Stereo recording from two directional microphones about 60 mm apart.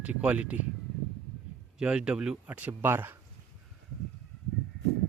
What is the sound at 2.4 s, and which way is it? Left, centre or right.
Speech, right.